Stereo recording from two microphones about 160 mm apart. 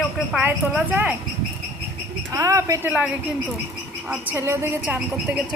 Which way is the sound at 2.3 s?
20° right (ahead or behind).